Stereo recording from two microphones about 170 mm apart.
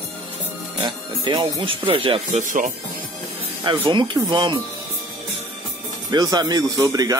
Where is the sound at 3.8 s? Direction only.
25° right (ahead or behind).